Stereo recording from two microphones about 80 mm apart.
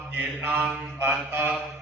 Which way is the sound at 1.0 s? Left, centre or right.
Right.